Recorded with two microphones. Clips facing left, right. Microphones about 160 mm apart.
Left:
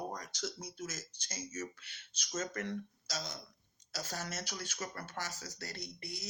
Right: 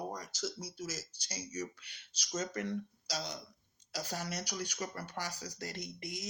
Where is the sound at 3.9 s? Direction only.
15° right (ahead or behind).